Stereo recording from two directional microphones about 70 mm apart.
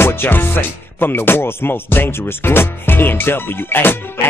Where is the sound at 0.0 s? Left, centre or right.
Left.